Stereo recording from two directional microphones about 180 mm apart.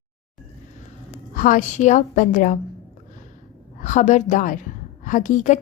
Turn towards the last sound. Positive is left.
turn(degrees=45)  # may be behind; listen again after turning